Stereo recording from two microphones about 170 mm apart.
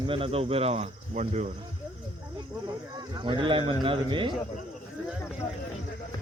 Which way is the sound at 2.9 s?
25° right (ahead or behind).